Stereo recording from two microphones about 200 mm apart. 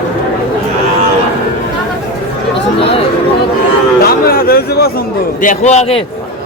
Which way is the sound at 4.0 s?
50° left (ahead or behind).